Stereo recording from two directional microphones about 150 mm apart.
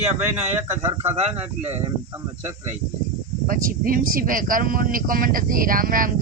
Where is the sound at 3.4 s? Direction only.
70° right (ahead or behind).